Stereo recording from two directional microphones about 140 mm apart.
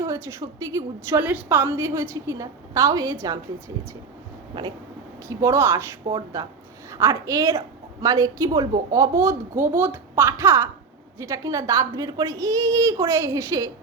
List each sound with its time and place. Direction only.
0.0 s speech: 20° right (ahead or behind)
1.2 s speech: 10° right (ahead or behind)
5.4 s speech: 20° right (ahead or behind)
6.1 s speech: 30° right (ahead or behind)